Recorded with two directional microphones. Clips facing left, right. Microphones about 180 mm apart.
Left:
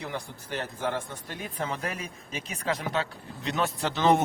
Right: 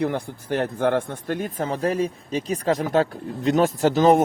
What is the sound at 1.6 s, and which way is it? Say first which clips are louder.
Speech: right 10 dB; 35° right (ahead or behind).